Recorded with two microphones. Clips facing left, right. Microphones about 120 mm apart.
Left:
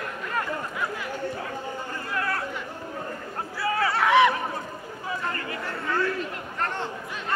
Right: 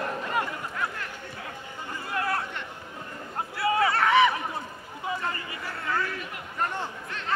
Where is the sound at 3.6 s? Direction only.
25° right (ahead or behind).